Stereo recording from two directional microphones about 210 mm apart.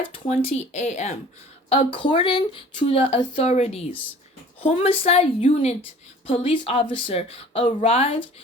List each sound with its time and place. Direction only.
0.1 s speech: 30° left (ahead or behind)